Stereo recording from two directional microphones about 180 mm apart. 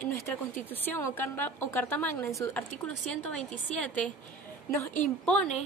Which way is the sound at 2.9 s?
Centre (ahead or behind).